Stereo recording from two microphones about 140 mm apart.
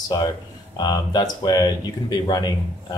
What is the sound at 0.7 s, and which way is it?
Speech, 30° left (ahead or behind).